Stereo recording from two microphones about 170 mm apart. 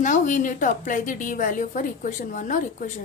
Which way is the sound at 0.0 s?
45° left (ahead or behind).